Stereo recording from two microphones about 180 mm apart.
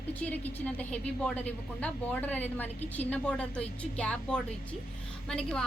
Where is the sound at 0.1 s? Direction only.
10° left (ahead or behind).